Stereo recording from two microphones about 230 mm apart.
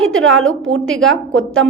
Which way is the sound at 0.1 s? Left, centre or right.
Right.